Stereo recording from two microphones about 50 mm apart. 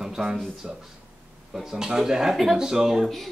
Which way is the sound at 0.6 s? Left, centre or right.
Centre.